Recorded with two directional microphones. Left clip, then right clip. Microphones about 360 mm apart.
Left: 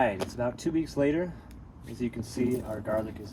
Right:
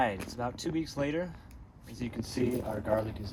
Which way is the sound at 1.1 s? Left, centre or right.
Centre.